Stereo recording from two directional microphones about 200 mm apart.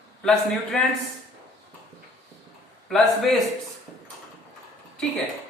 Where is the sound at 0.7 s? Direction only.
5° left (ahead or behind).